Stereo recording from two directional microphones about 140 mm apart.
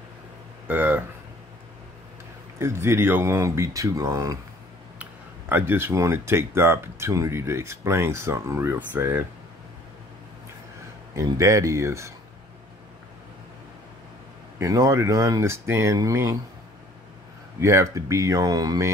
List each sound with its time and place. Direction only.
0.7 s a sound: 10° right (ahead or behind)
2.6 s speech: 20° right (ahead or behind)
5.5 s speech: 15° right (ahead or behind)
11.1 s speech: 25° right (ahead or behind)
14.6 s speech: 25° right (ahead or behind)
17.6 s speech: 20° right (ahead or behind)